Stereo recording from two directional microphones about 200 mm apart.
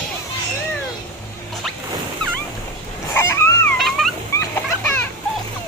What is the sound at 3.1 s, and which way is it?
Dog, 10° left (ahead or behind).